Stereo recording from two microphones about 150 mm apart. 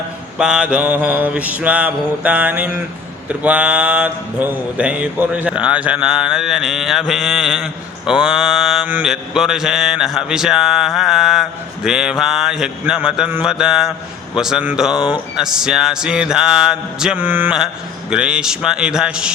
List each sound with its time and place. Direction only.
0.3 s mantra: 5° right (ahead or behind)